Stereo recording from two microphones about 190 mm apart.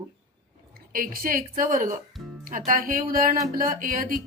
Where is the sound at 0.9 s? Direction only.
50° right (ahead or behind).